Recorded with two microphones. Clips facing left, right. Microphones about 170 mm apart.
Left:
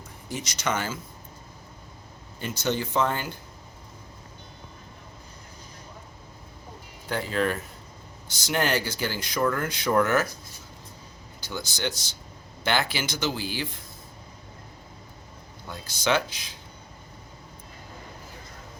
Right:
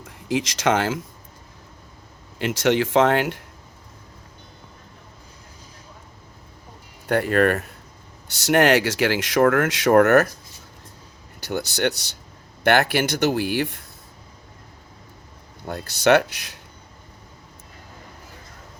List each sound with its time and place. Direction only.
0.0 s speech: 90° right
2.4 s speech: 90° right
7.1 s speech: 65° right (ahead or behind)
11.3 s speech: 65° right (ahead or behind)
15.6 s speech: 65° right (ahead or behind)